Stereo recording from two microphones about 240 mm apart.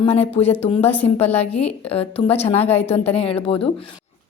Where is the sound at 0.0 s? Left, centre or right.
Left.